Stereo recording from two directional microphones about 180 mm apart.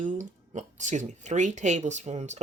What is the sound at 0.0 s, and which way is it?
Speech, 40° right (ahead or behind).